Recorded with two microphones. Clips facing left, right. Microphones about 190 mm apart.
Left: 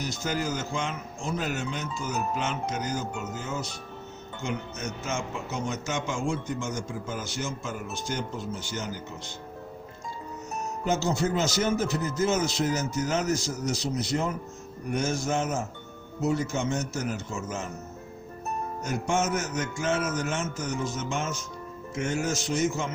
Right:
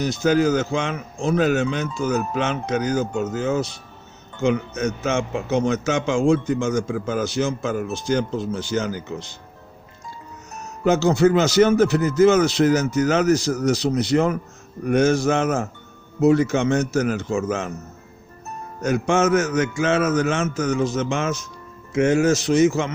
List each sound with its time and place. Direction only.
0.0 s a man's voice: 75° right (ahead or behind); by 9.2 s 90° right
10.8 s a man's voice: 70° right (ahead or behind)
18.8 s a man's voice: 80° right